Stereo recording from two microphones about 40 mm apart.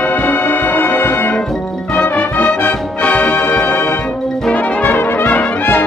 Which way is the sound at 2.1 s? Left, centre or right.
Left.